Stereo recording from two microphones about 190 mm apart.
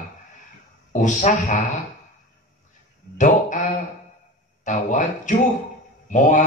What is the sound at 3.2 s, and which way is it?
A man's voice, 40° left (ahead or behind).